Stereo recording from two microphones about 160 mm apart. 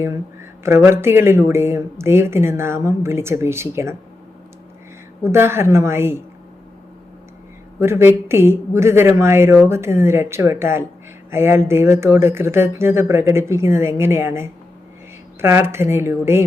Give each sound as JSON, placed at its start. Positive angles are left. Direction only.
{"t": 0.9, "sound": "speech", "side_deg": -15}
{"t": 5.2, "sound": "speech", "side_deg": -15}
{"t": 7.8, "sound": "speech", "side_deg": -15}